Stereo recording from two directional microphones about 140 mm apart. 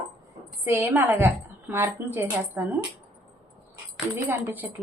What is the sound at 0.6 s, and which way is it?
A woman's voice, 15° right (ahead or behind).